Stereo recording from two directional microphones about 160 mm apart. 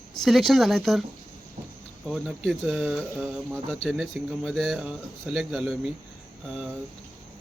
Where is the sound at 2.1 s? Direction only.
Centre (ahead or behind).